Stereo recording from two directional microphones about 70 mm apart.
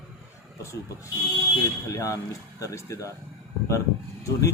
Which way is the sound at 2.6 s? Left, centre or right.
Left.